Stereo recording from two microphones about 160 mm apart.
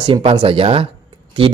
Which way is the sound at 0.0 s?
35° right (ahead or behind).